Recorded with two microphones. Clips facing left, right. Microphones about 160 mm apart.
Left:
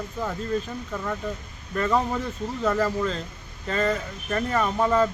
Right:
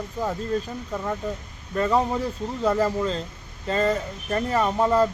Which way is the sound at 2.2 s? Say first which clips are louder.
Right 2 dB; 30° right (ahead or behind).